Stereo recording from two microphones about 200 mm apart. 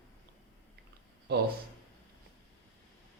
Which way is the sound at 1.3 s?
55° right (ahead or behind).